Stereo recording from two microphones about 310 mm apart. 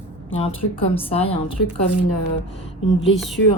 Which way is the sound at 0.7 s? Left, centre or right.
Centre.